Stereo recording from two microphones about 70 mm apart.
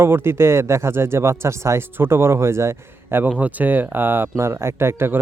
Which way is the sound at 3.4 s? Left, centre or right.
Right.